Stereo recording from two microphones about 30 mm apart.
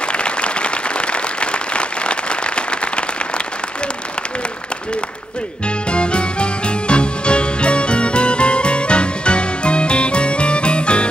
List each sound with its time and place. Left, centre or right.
0.1 s applause: left
5.9 s music: left